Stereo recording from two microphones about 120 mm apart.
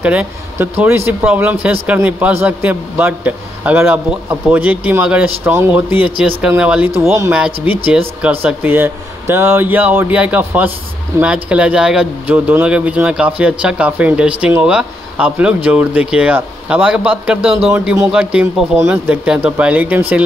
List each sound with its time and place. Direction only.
0.0 s speech: 10° right (ahead or behind)
7.0 s speech: 20° right (ahead or behind)